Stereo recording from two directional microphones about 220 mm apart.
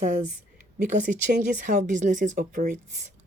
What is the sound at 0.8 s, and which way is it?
Speech, 35° right (ahead or behind).